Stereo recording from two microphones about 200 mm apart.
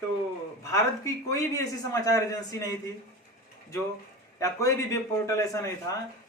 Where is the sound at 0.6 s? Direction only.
15° left (ahead or behind).